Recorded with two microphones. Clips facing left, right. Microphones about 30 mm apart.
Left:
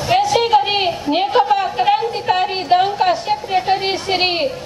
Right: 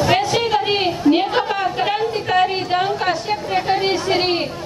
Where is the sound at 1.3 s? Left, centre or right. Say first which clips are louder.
Left 4 dB; centre.